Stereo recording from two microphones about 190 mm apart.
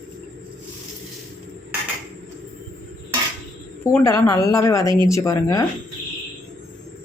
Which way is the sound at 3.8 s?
15° left (ahead or behind).